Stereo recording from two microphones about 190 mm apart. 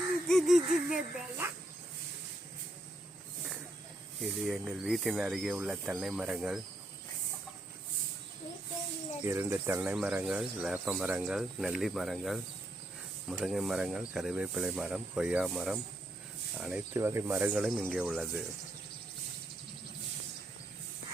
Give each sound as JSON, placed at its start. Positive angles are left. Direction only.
{"t": 0.3, "sound": "speech", "side_deg": 0}
{"t": 4.2, "sound": "speech", "side_deg": 0}
{"t": 9.2, "sound": "speech", "side_deg": -15}
{"t": 17.7, "sound": "speech", "side_deg": 5}